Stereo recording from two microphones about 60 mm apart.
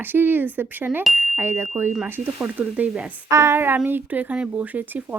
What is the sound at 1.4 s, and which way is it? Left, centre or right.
Speech, right.